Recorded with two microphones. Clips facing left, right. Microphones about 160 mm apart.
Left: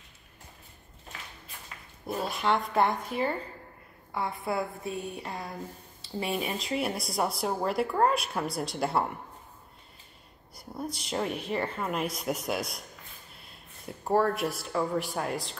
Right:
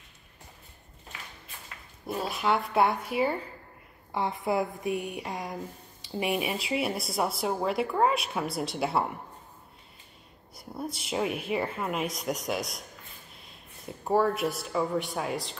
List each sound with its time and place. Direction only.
2.0 s a woman's voice: centre (ahead or behind)
4.1 s a woman's voice: 20° right (ahead or behind); by 9.1 s centre (ahead or behind)
10.5 s speech: centre (ahead or behind)